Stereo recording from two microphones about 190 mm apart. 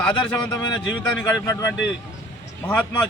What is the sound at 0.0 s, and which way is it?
Speech, 5° left (ahead or behind).